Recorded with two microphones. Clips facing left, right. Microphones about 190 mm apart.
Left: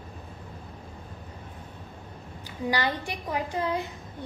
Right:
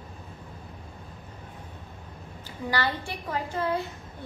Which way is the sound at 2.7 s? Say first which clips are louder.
Left 1 dB; 15° left (ahead or behind).